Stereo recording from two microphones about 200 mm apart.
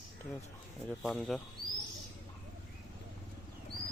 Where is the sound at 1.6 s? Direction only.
45° right (ahead or behind).